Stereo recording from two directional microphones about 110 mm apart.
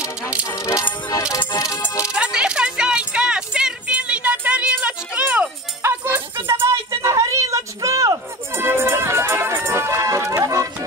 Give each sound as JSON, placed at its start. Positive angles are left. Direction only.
{"t": 0.5, "sound": "music", "side_deg": 30}
{"t": 2.0, "sound": "music", "side_deg": -10}